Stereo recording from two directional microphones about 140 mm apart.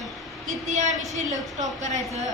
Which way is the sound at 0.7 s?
55° right (ahead or behind).